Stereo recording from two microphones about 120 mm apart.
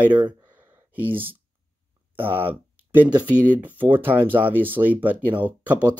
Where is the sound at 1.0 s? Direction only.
15° right (ahead or behind).